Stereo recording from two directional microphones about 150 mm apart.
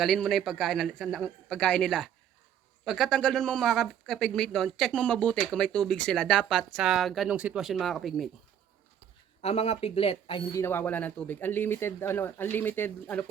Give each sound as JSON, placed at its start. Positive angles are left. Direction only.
{"t": 0.0, "sound": "speech", "side_deg": 0}
{"t": 9.4, "sound": "speech", "side_deg": 40}
{"t": 10.5, "sound": "speech", "side_deg": 15}